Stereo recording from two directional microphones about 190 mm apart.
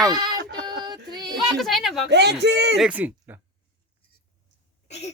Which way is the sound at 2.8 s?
10° right (ahead or behind).